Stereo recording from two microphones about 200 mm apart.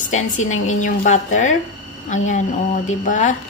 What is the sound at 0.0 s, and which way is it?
Speech, 40° left (ahead or behind).